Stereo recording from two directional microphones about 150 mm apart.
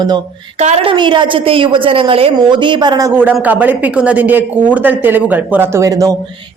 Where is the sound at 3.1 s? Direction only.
10° right (ahead or behind).